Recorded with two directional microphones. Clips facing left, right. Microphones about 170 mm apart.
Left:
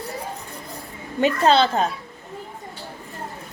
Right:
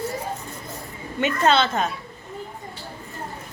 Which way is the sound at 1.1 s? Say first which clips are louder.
Left 3 dB; 35° left (ahead or behind).